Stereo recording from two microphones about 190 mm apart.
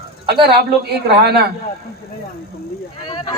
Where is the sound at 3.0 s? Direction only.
30° left (ahead or behind).